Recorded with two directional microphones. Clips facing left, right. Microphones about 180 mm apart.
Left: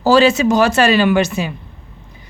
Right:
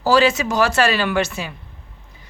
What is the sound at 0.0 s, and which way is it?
A woman's voice, 25° left (ahead or behind).